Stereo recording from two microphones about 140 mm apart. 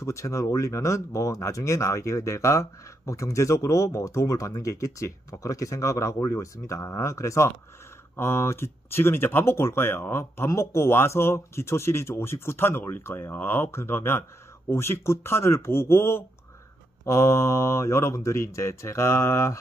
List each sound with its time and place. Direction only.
0.0 s speech: 20° left (ahead or behind)